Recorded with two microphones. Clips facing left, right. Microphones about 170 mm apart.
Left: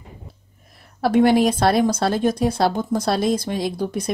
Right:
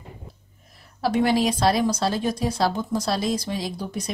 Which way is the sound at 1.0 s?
55° left (ahead or behind).